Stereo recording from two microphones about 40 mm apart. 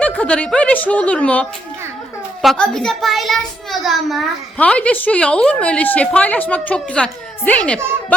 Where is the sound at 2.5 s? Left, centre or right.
Centre.